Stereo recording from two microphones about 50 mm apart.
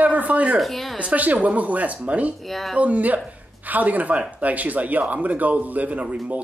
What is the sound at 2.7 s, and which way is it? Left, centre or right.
A man's voice, right.